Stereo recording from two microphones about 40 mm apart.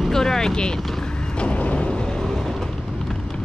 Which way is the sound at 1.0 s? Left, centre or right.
Left.